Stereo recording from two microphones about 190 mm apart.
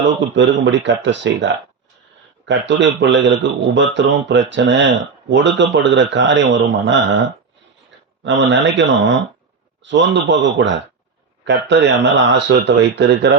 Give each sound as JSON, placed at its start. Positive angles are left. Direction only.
{"t": 0.3, "sound": "speech", "side_deg": -70}
{"t": 11.4, "sound": "speech", "side_deg": -65}